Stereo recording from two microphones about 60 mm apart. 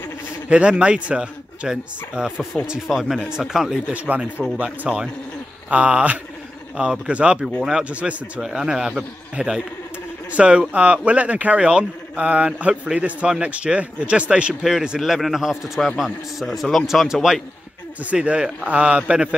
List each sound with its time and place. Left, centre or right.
0.5 s speech: centre
2.9 s a man's voice: centre
3.9 s speech: right
4.6 s speech: centre
8.4 s speech: centre
15.0 s a man's voice: centre
18.1 s speech: centre